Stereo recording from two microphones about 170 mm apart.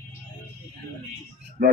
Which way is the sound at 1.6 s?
65° right (ahead or behind).